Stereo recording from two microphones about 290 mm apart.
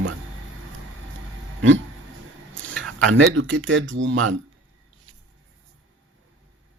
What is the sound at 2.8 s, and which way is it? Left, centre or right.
Speech, right.